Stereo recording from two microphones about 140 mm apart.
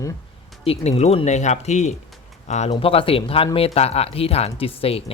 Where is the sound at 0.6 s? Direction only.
45° left (ahead or behind).